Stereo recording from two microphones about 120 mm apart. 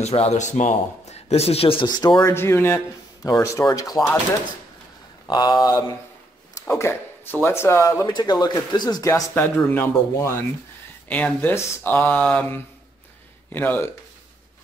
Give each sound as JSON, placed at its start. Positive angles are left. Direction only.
{"t": 0.0, "sound": "speech", "side_deg": 60}
{"t": 1.9, "sound": "speech", "side_deg": 35}
{"t": 2.3, "sound": "speech", "side_deg": 20}
{"t": 5.3, "sound": "speech", "side_deg": 35}
{"t": 8.1, "sound": "speech", "side_deg": 35}
{"t": 9.7, "sound": "speech", "side_deg": 20}